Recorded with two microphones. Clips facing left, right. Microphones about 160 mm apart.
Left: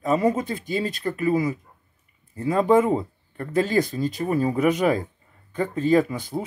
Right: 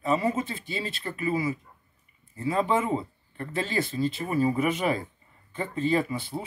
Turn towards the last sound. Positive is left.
turn(degrees=40)  # may be behind; listen again after turning